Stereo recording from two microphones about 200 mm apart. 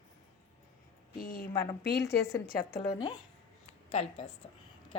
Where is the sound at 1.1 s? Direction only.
45° left (ahead or behind).